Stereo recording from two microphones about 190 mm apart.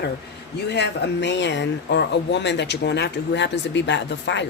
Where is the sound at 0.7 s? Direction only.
65° left (ahead or behind).